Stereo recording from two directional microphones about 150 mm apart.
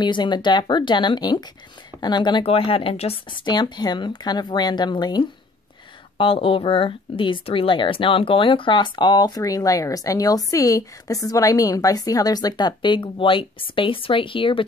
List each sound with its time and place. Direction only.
0.0 s speech: 30° left (ahead or behind)